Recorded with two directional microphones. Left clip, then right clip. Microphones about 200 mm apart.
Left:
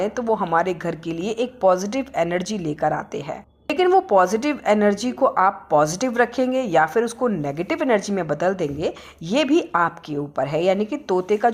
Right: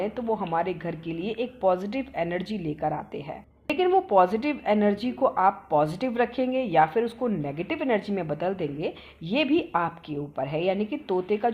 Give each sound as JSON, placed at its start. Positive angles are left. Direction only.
{"t": 0.0, "sound": "speech", "side_deg": 15}